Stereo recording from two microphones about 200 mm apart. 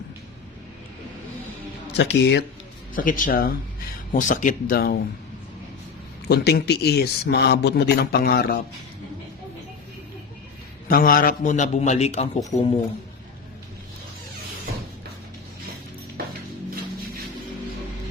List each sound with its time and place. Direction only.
1.9 s speech: 60° left (ahead or behind)
2.9 s speech: 45° left (ahead or behind)
6.2 s speech: 55° left (ahead or behind)
10.8 s a man's voice: 45° left (ahead or behind); by 12.8 s 25° left (ahead or behind)